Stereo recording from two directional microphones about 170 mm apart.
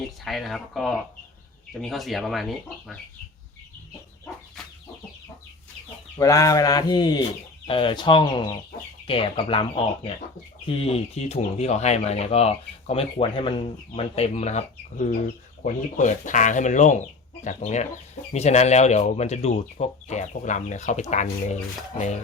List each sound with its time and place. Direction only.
0.0 s speech: centre (ahead or behind)
6.1 s speech: 20° left (ahead or behind); by 22.2 s 45° left (ahead or behind)